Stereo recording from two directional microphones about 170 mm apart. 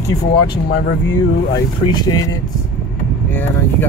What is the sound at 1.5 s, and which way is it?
Speech, 25° left (ahead or behind).